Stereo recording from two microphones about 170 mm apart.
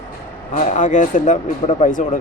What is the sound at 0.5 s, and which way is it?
Speech, 45° left (ahead or behind).